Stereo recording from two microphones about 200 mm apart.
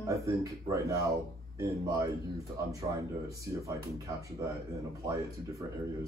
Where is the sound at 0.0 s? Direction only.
15° right (ahead or behind).